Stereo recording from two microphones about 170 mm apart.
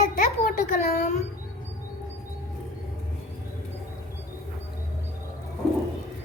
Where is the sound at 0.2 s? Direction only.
50° left (ahead or behind).